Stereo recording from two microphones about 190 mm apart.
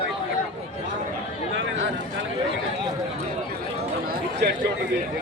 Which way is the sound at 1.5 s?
75° right (ahead or behind).